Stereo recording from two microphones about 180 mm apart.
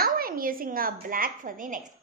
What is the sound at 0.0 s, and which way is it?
A woman's voice, 55° right (ahead or behind).